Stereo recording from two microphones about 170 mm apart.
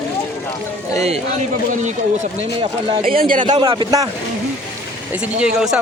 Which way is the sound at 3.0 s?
60° right (ahead or behind).